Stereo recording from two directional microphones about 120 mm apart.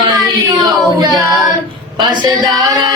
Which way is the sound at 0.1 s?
30° right (ahead or behind).